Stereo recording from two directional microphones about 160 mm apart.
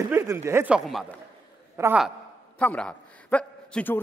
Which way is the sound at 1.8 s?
20° right (ahead or behind).